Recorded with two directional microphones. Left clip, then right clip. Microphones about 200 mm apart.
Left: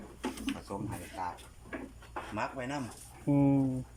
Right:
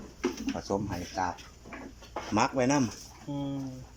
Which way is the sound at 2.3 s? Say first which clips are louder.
Right 11 dB; 60° right (ahead or behind).